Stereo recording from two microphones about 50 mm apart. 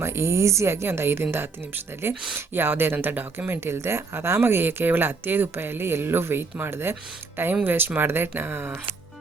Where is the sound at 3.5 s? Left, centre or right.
Right.